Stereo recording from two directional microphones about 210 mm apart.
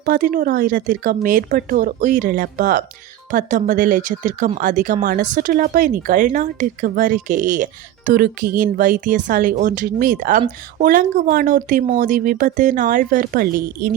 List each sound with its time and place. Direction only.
0.0 s speech: 40° right (ahead or behind)